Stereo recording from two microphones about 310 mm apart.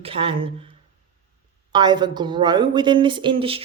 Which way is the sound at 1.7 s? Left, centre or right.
Centre.